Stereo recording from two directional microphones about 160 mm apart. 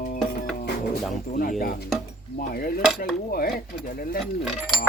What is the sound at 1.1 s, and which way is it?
Speech, 55° left (ahead or behind).